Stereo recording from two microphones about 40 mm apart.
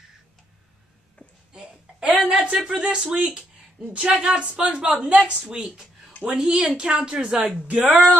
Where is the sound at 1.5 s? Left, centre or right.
Right.